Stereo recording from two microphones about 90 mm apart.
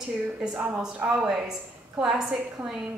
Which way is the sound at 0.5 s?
20° right (ahead or behind).